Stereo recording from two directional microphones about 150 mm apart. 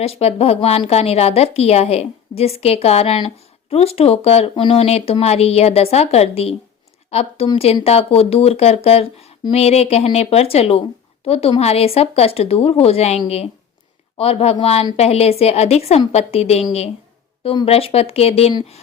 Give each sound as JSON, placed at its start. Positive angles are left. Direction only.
{"t": 0.0, "sound": "a woman's voice", "side_deg": 45}